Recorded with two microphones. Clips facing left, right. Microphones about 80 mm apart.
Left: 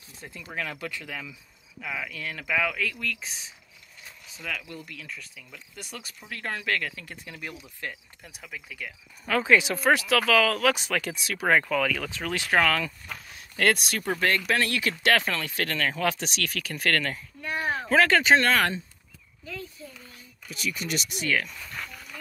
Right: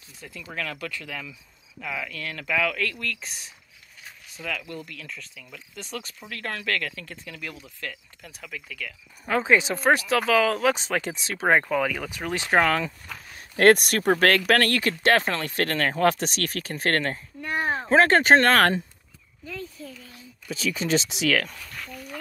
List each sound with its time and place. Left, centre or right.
0.2 s speech: left
0.5 s speech: centre
9.3 s speech: right
13.3 s speech: right
14.2 s speech: right
14.8 s speech: right
21.1 s speech: right